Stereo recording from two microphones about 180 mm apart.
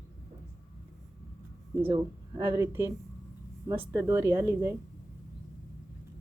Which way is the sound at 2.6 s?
10° right (ahead or behind).